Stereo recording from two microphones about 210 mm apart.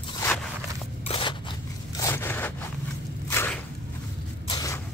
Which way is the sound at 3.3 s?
10° left (ahead or behind).